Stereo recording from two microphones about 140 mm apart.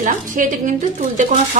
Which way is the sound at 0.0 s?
70° right (ahead or behind).